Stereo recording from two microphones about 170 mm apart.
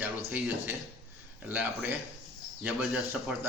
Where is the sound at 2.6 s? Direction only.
5° right (ahead or behind).